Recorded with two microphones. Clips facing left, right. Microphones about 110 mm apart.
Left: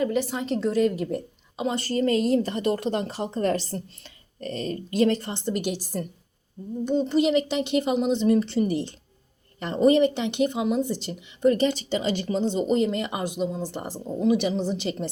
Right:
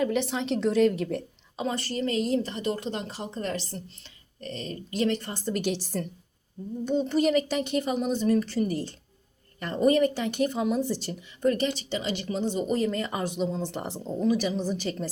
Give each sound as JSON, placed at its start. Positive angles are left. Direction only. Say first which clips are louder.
{"t": 0.0, "sound": "a woman's voice", "louder": "left 1 dB", "side_deg": 5}
{"t": 1.7, "sound": "a woman's voice", "louder": "left 6 dB", "side_deg": 30}
{"t": 5.5, "sound": "a woman's voice", "louder": "even", "side_deg": 10}
{"t": 7.3, "sound": "a woman's voice", "louder": "left 2 dB", "side_deg": 20}
{"t": 11.9, "sound": "speech", "louder": "left 5 dB", "side_deg": 35}
{"t": 14.0, "sound": "speech", "louder": "left 3 dB", "side_deg": 15}